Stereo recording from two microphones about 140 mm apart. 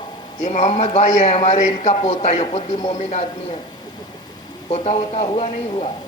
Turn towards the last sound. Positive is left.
turn(degrees=45)  # may be behind; listen again after turning